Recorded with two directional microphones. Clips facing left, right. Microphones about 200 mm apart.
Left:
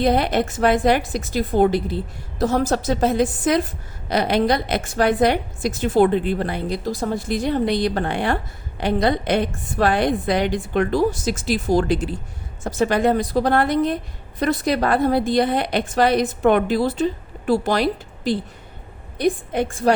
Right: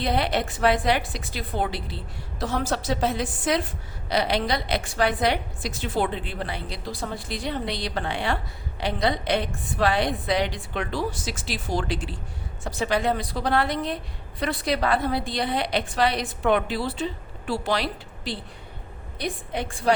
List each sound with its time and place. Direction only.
0.0 s a woman's voice: 45° left (ahead or behind)